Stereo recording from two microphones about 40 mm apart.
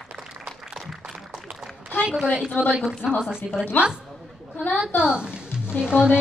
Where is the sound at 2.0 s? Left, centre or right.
Centre.